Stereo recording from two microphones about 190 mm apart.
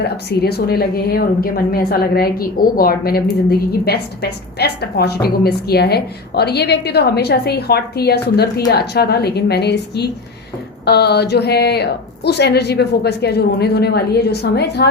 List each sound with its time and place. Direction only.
0.0 s a woman's voice: 60° left (ahead or behind)